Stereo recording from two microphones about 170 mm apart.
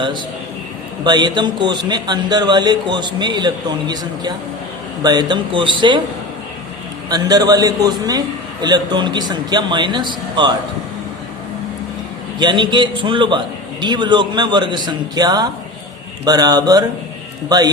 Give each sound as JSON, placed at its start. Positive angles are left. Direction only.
{"t": 1.0, "sound": "a man's voice", "side_deg": -25}
{"t": 7.1, "sound": "a man's voice", "side_deg": -20}
{"t": 12.4, "sound": "a man's voice", "side_deg": -25}